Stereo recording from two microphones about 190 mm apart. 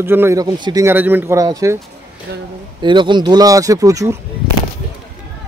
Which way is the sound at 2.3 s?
60° right (ahead or behind).